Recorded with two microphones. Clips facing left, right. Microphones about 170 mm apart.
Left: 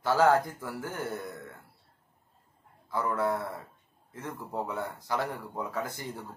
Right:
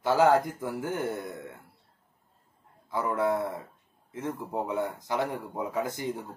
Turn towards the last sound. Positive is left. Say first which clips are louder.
# right 5 dB
turn(degrees=-20)  # may be behind; listen again after turning